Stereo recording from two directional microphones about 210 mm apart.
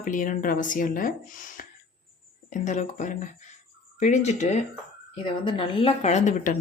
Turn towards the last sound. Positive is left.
turn(degrees=35)  # may be behind; listen again after turning